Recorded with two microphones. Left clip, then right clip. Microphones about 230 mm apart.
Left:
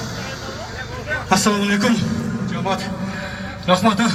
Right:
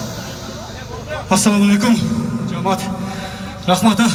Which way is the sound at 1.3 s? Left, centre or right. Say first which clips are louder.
Right 2 dB; right.